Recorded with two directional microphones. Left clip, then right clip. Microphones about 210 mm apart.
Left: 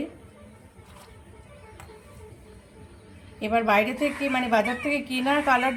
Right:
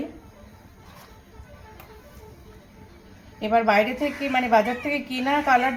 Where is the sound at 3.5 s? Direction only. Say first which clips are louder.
Right 2 dB; 15° left (ahead or behind).